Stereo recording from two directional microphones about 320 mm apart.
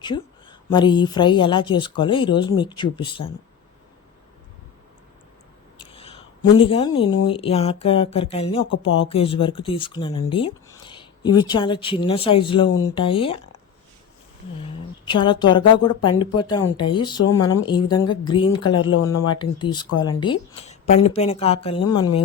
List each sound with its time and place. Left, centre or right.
0.0 s speech: centre
5.8 s a sound: centre
7.3 s speech: centre
14.6 s speech: centre
17.2 s speech: left
17.7 s speech: centre